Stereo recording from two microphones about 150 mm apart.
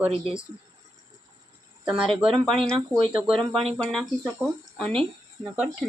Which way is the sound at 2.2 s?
Centre (ahead or behind).